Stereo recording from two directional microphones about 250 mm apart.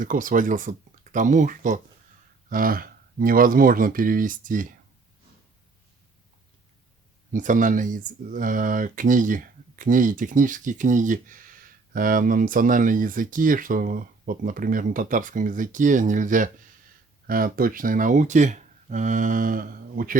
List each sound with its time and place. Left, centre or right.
0.0 s speech: right
7.3 s speech: right